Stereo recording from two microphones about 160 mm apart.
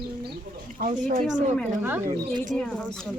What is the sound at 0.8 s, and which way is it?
Speech, 50° right (ahead or behind).